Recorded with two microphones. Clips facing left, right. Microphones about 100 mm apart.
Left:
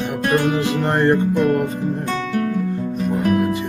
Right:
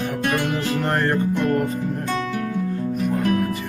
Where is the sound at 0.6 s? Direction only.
20° left (ahead or behind).